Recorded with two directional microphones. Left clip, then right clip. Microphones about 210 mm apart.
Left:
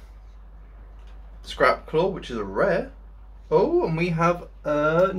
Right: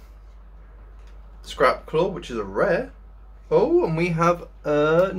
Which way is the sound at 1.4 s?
10° right (ahead or behind).